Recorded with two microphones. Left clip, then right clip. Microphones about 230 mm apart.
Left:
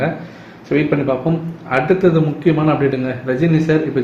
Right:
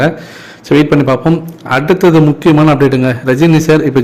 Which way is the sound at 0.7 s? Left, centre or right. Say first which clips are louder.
Right 7 dB; right.